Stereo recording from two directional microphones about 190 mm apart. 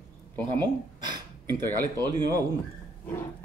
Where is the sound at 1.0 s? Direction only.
20° right (ahead or behind).